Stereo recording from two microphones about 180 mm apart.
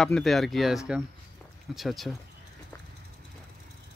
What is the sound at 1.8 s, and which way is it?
Speech, centre (ahead or behind).